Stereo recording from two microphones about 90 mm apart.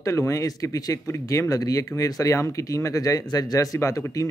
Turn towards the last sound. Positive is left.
turn(degrees=35)  # may be behind; listen again after turning